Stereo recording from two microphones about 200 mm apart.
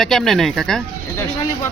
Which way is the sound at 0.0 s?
Centre (ahead or behind).